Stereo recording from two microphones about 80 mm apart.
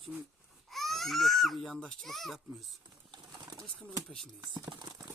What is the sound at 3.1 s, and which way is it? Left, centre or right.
Bird, right.